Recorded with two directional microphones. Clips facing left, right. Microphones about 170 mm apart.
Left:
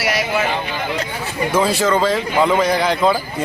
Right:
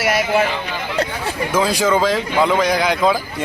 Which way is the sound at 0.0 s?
50° right (ahead or behind).